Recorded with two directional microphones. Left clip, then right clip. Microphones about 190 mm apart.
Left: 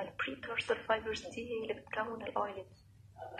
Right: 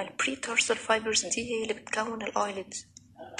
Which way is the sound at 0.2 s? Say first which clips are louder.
Right 11 dB; 40° right (ahead or behind).